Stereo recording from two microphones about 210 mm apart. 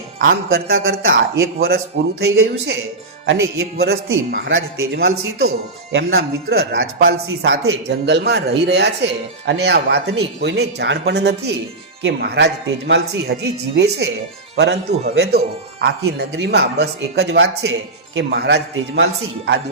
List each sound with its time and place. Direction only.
0.2 s speech: 50° right (ahead or behind)
3.2 s speech: 70° right (ahead or behind)
3.8 s speech: 50° right (ahead or behind)
4.9 s a man's voice: 50° right (ahead or behind)